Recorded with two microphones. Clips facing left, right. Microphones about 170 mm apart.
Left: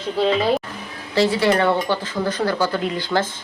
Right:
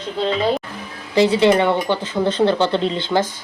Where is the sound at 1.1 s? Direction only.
20° right (ahead or behind).